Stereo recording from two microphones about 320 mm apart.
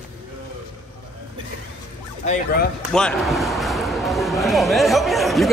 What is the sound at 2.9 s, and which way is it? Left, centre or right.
A man's voice, centre.